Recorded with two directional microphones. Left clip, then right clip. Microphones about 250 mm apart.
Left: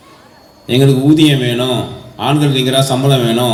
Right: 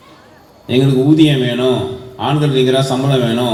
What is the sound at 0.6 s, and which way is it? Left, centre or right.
Speech, left.